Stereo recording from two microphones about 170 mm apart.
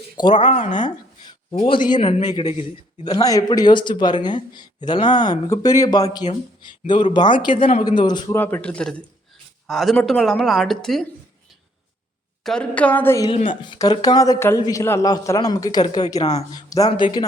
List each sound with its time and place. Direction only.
0.2 s a man's voice: 30° left (ahead or behind)
3.0 s speech: 20° left (ahead or behind)
8.4 s a woman's voice: 10° left (ahead or behind)
12.4 s a woman's voice: 5° left (ahead or behind)
13.6 s speech: 25° left (ahead or behind)
16.2 s a man's voice: 40° left (ahead or behind)
16.6 s speech: 20° left (ahead or behind)